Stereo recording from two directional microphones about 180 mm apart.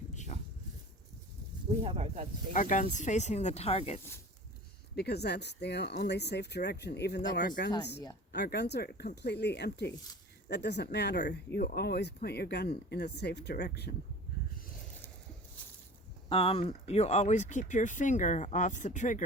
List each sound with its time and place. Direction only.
0.1 s a sound: 40° left (ahead or behind)
1.8 s speech: 35° right (ahead or behind)
2.5 s speech: 45° left (ahead or behind)
4.9 s speech: 65° left (ahead or behind)
7.4 s speech: 55° left (ahead or behind)
8.3 s speech: 65° left (ahead or behind)
16.3 s speech: 30° left (ahead or behind)